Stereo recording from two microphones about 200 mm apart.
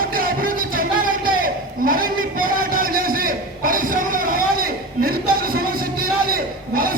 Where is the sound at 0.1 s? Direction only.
45° right (ahead or behind).